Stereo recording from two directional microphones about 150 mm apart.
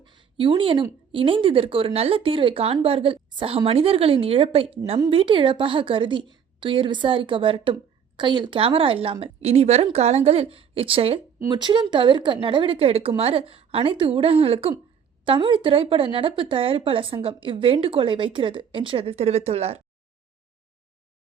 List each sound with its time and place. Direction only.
0.0 s speech: 30° right (ahead or behind)
11.3 s speech: 25° right (ahead or behind); by 19.8 s 45° right (ahead or behind)